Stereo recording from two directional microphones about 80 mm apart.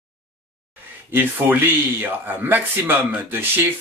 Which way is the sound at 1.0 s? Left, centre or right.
Right.